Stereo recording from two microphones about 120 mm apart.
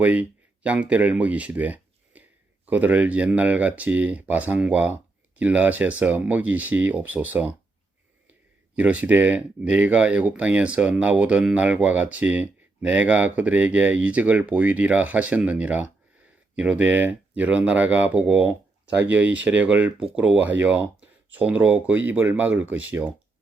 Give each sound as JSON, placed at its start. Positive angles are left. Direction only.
{"t": 0.0, "sound": "speech", "side_deg": -10}